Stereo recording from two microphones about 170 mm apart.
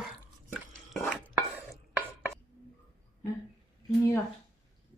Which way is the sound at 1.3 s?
15° right (ahead or behind).